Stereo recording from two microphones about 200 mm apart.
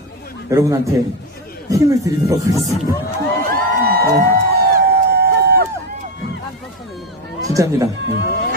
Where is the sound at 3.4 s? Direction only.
50° right (ahead or behind).